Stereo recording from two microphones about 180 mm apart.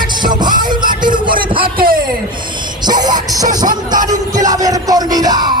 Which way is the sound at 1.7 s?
55° right (ahead or behind).